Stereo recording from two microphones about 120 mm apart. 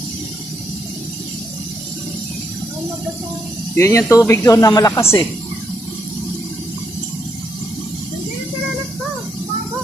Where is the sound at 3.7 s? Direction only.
20° left (ahead or behind).